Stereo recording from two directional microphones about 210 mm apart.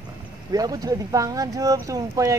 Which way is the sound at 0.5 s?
15° right (ahead or behind).